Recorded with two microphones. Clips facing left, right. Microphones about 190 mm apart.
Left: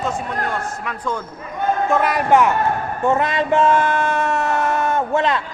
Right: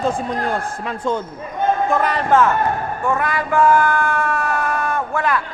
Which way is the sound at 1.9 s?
10° left (ahead or behind).